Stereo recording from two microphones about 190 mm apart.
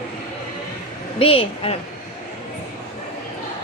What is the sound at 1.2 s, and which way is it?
Speech, 30° left (ahead or behind).